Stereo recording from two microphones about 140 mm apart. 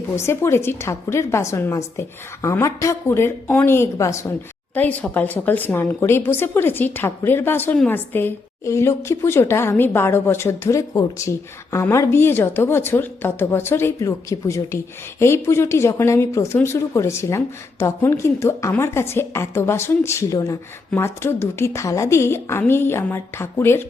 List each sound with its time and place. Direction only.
0.2 s a woman's voice: 20° left (ahead or behind)
4.7 s a woman's voice: 10° left (ahead or behind)